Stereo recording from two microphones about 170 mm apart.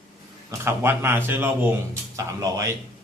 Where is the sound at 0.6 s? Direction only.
15° right (ahead or behind).